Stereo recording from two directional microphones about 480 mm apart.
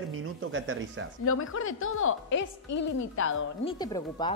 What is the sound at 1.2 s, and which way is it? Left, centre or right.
Speech, left.